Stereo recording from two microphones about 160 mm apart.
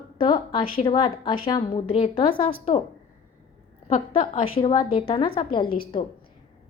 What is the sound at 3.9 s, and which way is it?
A woman's voice, 40° left (ahead or behind).